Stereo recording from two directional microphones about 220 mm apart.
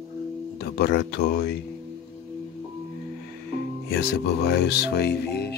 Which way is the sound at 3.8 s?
45° left (ahead or behind).